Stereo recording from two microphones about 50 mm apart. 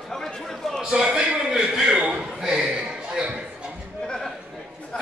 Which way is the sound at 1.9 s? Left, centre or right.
Right.